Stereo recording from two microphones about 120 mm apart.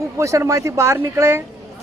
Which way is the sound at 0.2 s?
25° right (ahead or behind).